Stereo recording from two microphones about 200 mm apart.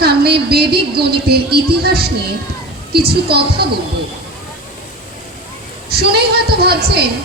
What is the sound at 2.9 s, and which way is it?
Speech, 55° right (ahead or behind).